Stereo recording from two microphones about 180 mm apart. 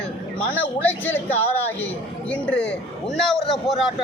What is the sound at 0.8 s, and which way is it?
Speech, 10° left (ahead or behind).